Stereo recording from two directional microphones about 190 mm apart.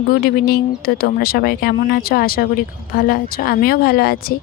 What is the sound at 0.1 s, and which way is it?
Speech, 55° left (ahead or behind).